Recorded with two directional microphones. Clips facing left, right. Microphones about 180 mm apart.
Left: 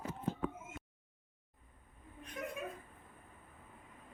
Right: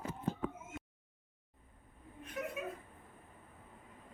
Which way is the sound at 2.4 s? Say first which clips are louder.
Right 2 dB; 5° right (ahead or behind).